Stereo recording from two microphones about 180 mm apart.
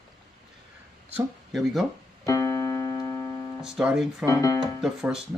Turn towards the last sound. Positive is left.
turn(degrees=-5)  # may be behind; listen again after turning